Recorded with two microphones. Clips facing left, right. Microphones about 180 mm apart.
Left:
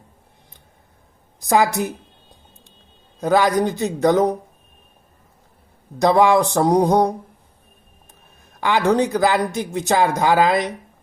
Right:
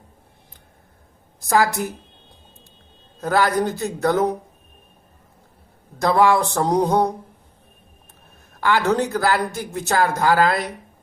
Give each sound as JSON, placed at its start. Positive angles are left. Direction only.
{"t": 1.4, "sound": "speech", "side_deg": 15}
{"t": 3.2, "sound": "speech", "side_deg": 15}
{"t": 6.0, "sound": "speech", "side_deg": 15}
{"t": 8.6, "sound": "speech", "side_deg": 15}